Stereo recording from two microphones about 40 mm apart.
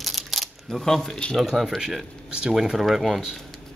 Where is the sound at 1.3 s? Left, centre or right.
Centre.